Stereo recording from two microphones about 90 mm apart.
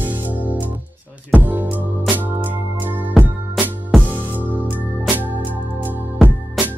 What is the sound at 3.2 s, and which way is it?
Music, 20° right (ahead or behind).